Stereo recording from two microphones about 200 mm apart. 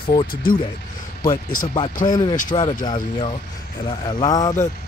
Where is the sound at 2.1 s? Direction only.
20° left (ahead or behind).